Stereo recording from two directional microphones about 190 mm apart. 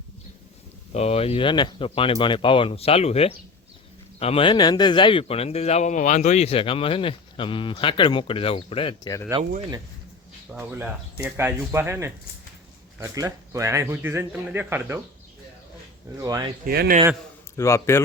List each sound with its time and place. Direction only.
0.9 s speech: 35° left (ahead or behind)
9.4 s speech: 40° right (ahead or behind)
10.5 s speech: 10° right (ahead or behind)
16.1 s speech: 20° right (ahead or behind)
16.6 s speech: 55° right (ahead or behind)
17.6 s speech: 15° left (ahead or behind)